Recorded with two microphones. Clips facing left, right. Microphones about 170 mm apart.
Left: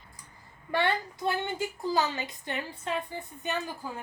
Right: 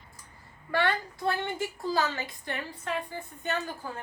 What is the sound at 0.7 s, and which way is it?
A woman's voice, 20° left (ahead or behind).